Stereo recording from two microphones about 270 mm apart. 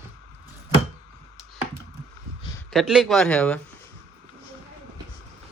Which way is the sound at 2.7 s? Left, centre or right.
Centre.